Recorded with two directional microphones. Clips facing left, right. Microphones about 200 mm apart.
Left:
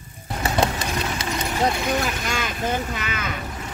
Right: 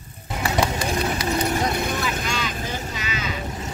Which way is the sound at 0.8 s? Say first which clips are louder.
Right 3 dB; 30° right (ahead or behind).